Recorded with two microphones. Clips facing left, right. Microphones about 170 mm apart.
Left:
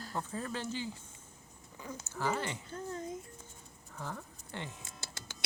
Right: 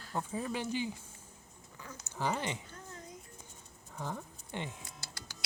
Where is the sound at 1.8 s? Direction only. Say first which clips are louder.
Left 5 dB; 20° left (ahead or behind).